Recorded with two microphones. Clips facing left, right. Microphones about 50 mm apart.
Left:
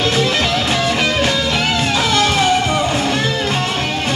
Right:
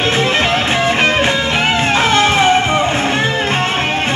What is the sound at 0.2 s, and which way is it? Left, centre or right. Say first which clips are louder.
Music: right 2 dB; right.